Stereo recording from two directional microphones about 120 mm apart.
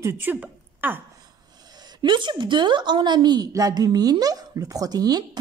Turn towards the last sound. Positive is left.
turn(degrees=-35)  # may be behind; listen again after turning